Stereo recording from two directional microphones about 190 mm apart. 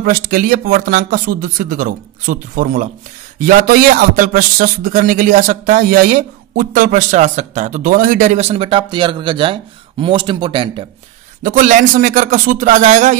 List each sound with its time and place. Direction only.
0.0 s a man's voice: 50° right (ahead or behind); by 10.9 s 25° right (ahead or behind)
11.4 s a man's voice: 45° right (ahead or behind)